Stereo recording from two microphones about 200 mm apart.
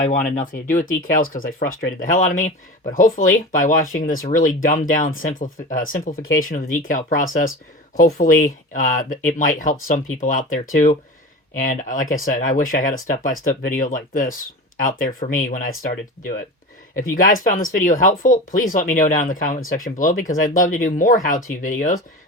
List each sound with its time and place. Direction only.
0.0 s speech: 40° left (ahead or behind)
17.0 s speech: 45° left (ahead or behind)